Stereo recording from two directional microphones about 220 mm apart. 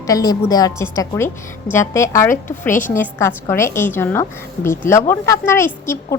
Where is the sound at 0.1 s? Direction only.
15° left (ahead or behind).